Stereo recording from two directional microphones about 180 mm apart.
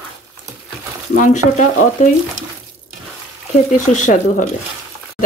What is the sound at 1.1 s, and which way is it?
Speech, 45° left (ahead or behind).